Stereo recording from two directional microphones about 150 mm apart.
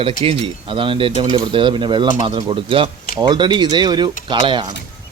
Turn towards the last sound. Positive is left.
turn(degrees=-30)  # may be behind; listen again after turning